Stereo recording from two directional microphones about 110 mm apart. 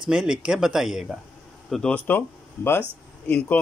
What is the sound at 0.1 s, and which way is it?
Speech, 5° right (ahead or behind).